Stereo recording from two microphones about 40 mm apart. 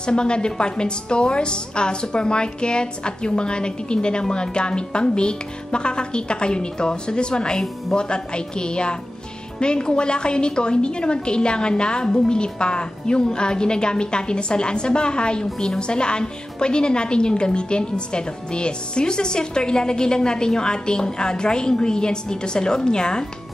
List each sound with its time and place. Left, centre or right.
0.0 s a woman's voice: left